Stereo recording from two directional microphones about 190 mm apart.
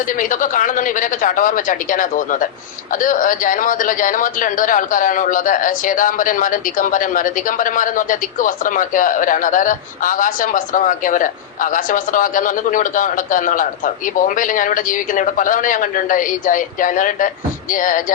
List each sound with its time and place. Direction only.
0.1 s a man's voice: 45° left (ahead or behind)